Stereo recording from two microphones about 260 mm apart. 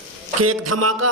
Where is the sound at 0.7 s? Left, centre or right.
Right.